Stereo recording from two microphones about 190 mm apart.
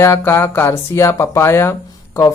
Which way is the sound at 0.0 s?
15° left (ahead or behind).